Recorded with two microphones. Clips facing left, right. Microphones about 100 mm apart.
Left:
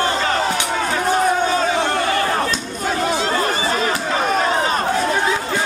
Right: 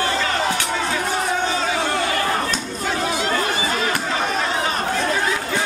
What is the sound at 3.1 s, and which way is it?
Chatter, 35° left (ahead or behind).